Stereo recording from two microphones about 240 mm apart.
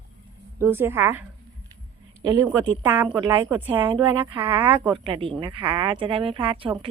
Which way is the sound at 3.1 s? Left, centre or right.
Centre.